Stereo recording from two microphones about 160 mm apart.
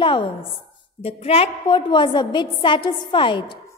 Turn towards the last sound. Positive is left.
turn(degrees=30)  # may be behind; listen again after turning